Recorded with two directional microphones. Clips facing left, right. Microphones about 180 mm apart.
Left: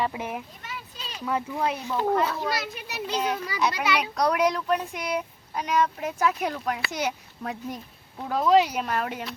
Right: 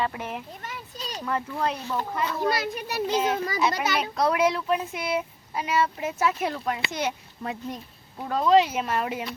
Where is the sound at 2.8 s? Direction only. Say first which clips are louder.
Right 6 dB; 50° right (ahead or behind).